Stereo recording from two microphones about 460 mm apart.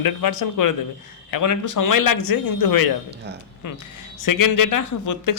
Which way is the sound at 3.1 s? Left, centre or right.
Right.